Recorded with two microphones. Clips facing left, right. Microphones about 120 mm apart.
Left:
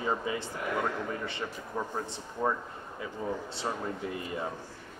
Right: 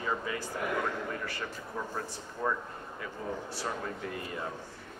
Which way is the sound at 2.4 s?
20° left (ahead or behind).